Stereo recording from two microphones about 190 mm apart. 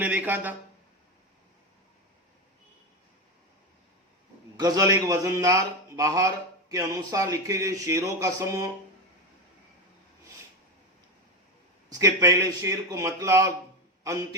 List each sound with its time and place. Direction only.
0.0 s a man's voice: 10° right (ahead or behind)
4.5 s a man's voice: 20° right (ahead or behind)
11.9 s a man's voice: 20° right (ahead or behind)